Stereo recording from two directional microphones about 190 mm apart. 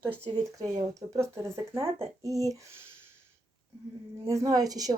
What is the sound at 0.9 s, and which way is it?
Speech, 15° right (ahead or behind).